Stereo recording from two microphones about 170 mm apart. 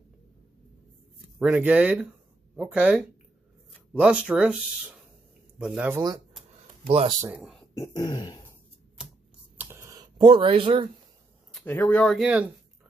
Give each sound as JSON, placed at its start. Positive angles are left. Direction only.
{"t": 1.4, "sound": "speech", "side_deg": -10}
{"t": 5.6, "sound": "speech", "side_deg": -5}
{"t": 6.9, "sound": "speech", "side_deg": -35}
{"t": 7.7, "sound": "throat clearing", "side_deg": 20}
{"t": 9.6, "sound": "a sound", "side_deg": -15}
{"t": 10.1, "sound": "speech", "side_deg": -30}
{"t": 11.5, "sound": "speech", "side_deg": 10}